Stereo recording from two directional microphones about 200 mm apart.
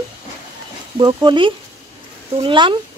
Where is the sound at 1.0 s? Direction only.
20° right (ahead or behind).